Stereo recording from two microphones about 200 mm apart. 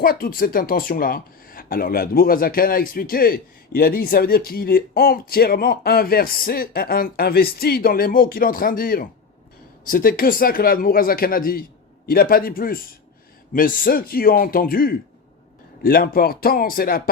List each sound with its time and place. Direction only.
0.0 s speech: 45° left (ahead or behind)